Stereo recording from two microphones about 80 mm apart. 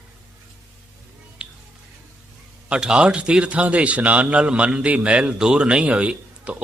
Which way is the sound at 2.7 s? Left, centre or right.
Centre.